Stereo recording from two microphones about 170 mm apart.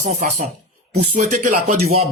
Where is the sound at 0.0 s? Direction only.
45° right (ahead or behind).